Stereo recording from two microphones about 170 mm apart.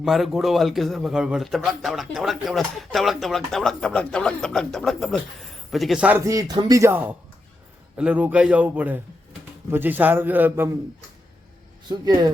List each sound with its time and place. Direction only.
0.0 s a man's voice: centre (ahead or behind)
11.9 s speech: 25° right (ahead or behind)